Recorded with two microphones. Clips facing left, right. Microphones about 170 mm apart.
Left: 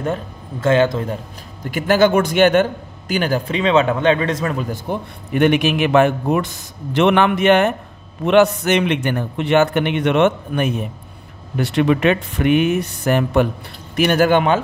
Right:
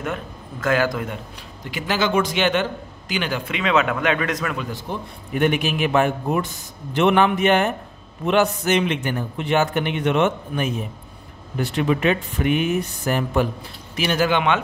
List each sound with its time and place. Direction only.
0.0 s speech: 30° left (ahead or behind)
1.6 s a man's voice: 50° left (ahead or behind); by 4.6 s 30° left (ahead or behind)
4.6 s speech: 50° left (ahead or behind)
5.3 s a man's voice: 70° left (ahead or behind)
13.9 s speech: 55° left (ahead or behind)